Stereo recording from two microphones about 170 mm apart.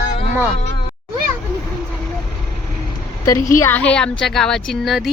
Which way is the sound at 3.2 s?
20° left (ahead or behind).